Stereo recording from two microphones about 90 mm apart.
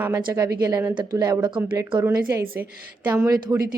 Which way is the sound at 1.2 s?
50° right (ahead or behind).